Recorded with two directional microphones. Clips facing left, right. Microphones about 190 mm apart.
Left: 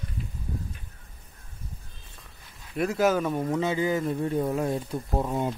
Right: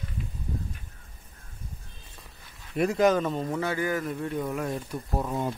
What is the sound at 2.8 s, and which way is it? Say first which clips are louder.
Speech: right 1 dB; 5° left (ahead or behind).